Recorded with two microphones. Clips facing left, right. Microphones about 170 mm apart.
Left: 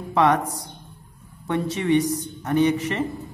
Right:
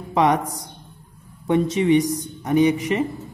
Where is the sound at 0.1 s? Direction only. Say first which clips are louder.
Right 1 dB; 15° right (ahead or behind).